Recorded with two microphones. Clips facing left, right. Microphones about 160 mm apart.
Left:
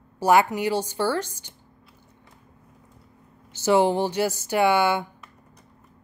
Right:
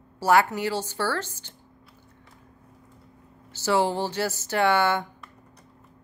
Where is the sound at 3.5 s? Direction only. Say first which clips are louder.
Left 4 dB; 20° left (ahead or behind).